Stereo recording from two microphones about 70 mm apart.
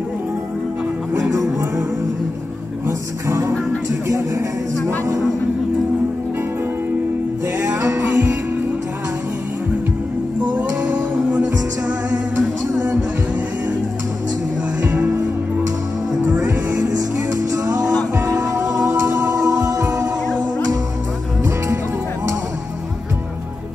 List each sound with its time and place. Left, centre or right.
1.3 s music: right
3.3 s music: right
7.6 s music: right
10.4 s music: centre
14.8 s music: centre
16.4 s music: right